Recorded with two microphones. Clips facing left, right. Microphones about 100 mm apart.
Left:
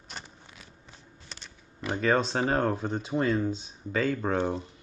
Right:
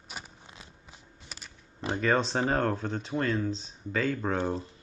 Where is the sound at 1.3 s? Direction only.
5° right (ahead or behind).